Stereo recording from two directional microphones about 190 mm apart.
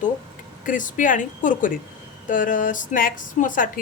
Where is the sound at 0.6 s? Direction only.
45° left (ahead or behind).